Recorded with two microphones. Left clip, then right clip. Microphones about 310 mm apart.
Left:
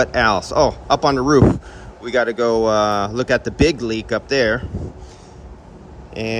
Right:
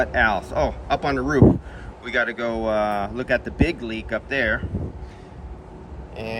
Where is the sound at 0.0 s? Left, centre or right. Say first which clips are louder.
Left 4 dB; centre.